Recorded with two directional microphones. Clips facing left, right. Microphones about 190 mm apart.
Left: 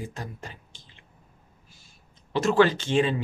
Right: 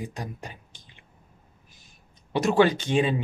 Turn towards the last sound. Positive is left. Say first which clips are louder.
# even
turn(degrees=-15)  # may be behind; listen again after turning